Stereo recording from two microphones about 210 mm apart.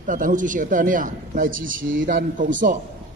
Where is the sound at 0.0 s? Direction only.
40° right (ahead or behind).